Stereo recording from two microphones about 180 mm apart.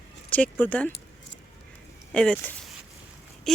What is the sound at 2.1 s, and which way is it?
Speech, 5° left (ahead or behind).